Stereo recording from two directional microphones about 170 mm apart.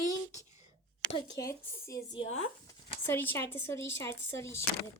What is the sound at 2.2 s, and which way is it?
Speech, 40° left (ahead or behind).